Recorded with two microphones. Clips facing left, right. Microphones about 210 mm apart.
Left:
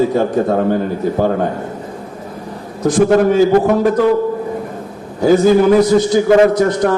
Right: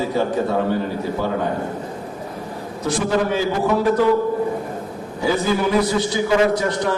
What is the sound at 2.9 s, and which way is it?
Speech, 45° left (ahead or behind).